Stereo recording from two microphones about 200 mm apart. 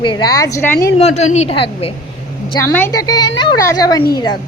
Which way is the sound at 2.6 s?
10° left (ahead or behind).